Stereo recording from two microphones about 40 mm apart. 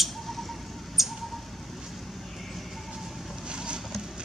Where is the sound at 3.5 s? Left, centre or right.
Right.